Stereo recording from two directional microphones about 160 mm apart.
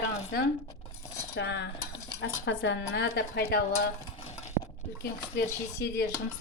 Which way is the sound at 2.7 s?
90° left.